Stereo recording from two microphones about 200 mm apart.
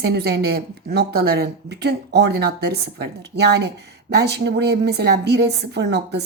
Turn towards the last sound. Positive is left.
turn(degrees=-55)  # may be behind; listen again after turning